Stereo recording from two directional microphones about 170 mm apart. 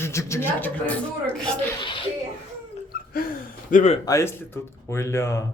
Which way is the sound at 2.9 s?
60° left (ahead or behind).